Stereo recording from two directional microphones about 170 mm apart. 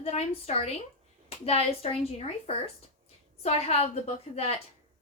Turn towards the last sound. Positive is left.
turn(degrees=35)  # may be behind; listen again after turning